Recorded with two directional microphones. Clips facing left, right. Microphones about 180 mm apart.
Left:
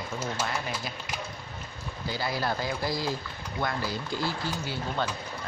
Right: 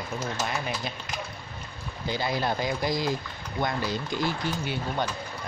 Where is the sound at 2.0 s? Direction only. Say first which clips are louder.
Right 2 dB; 20° right (ahead or behind).